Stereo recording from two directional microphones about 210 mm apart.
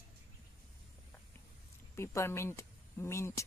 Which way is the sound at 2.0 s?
10° left (ahead or behind).